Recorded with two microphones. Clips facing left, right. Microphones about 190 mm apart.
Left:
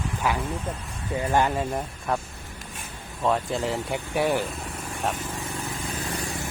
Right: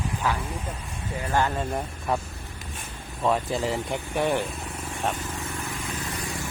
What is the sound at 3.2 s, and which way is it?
Speech, centre (ahead or behind).